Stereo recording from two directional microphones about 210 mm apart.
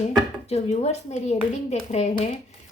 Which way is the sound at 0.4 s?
30° left (ahead or behind).